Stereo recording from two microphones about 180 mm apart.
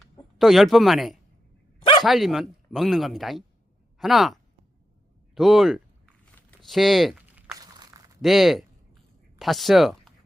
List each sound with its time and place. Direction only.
0.0 s speech: centre (ahead or behind)
1.8 s bow-wow: 30° left (ahead or behind)
2.0 s speech: centre (ahead or behind)
6.3 s crumpling: centre (ahead or behind)
7.5 s crushing: 20° right (ahead or behind)
8.2 s speech: centre (ahead or behind)